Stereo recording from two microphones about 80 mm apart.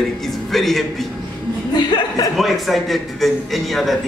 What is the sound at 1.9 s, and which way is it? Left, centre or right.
Speech, left.